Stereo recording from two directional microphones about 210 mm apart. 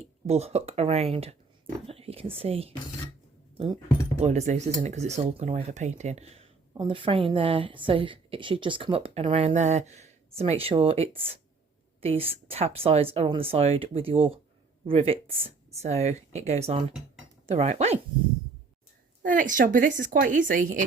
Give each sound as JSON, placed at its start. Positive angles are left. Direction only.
{"t": 0.3, "sound": "speech", "side_deg": -30}
{"t": 4.2, "sound": "speech", "side_deg": -30}
{"t": 19.2, "sound": "speech", "side_deg": -40}